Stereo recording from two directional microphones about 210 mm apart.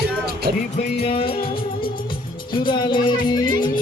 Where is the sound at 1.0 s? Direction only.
25° left (ahead or behind).